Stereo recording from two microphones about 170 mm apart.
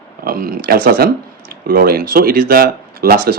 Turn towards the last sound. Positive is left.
turn(degrees=-60)  # may be behind; listen again after turning